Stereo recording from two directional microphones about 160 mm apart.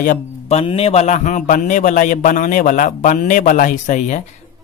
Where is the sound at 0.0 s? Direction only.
45° left (ahead or behind).